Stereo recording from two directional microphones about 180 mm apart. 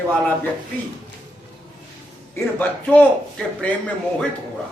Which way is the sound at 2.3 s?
10° left (ahead or behind).